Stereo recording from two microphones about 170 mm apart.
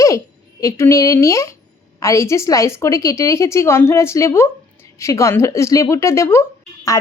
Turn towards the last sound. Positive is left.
turn(degrees=25)  # may be behind; listen again after turning